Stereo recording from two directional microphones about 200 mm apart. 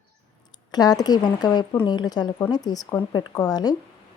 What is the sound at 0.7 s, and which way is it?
Speech, 20° left (ahead or behind).